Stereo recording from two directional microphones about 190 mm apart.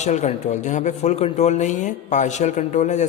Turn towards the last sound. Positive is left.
turn(degrees=40)  # may be behind; listen again after turning